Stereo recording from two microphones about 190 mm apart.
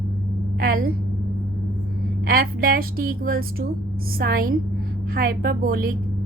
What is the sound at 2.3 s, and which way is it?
A woman's voice, 50° right (ahead or behind).